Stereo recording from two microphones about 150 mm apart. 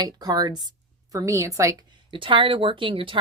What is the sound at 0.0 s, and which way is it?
Speech, 25° right (ahead or behind).